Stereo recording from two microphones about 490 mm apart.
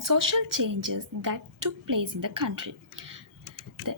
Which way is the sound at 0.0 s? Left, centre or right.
Right.